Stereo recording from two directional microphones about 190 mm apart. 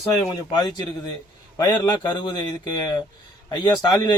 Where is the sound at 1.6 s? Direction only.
20° left (ahead or behind).